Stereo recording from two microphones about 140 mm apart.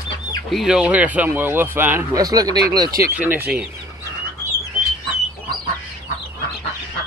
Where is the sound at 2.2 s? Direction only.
25° right (ahead or behind).